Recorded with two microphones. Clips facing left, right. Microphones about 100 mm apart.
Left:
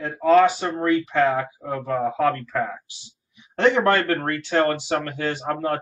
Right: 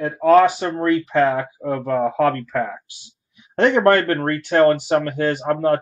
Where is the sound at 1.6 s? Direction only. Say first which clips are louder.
Right 7 dB; 45° right (ahead or behind).